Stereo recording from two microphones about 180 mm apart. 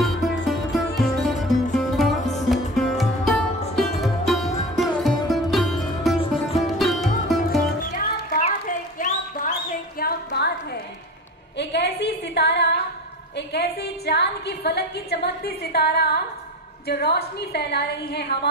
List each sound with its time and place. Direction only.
0.0 s music: centre (ahead or behind)
6.1 s music: 30° left (ahead or behind)
6.8 s music: centre (ahead or behind)
7.4 s music: 50° left (ahead or behind)
8.6 s a sound: 45° left (ahead or behind)
9.9 s music: 60° left (ahead or behind)
11.5 s a sound: 70° left (ahead or behind)